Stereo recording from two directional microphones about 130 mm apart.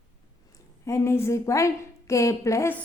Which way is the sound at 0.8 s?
20° left (ahead or behind).